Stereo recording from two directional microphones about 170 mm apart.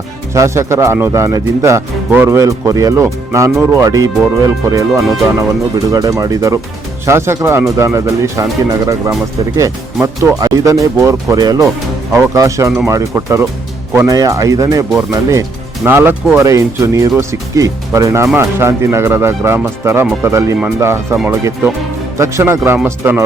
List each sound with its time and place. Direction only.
0.3 s speech: 15° right (ahead or behind)
9.6 s speech: 20° right (ahead or behind)